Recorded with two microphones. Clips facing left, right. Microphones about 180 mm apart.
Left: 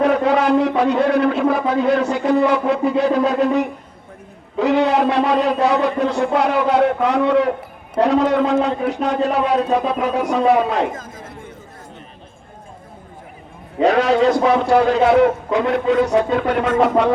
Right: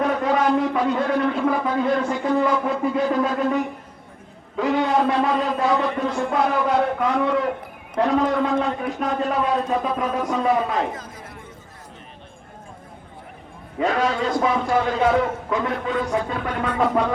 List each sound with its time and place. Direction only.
0.0 s a sound: 70° left (ahead or behind)
0.8 s a man's voice: 75° left (ahead or behind)
10.9 s speech: 45° left (ahead or behind)
13.8 s a man's voice: 75° left (ahead or behind)